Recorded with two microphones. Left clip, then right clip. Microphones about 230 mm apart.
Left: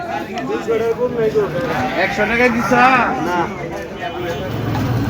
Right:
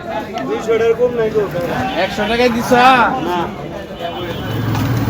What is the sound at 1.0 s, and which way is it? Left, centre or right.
Speech, right.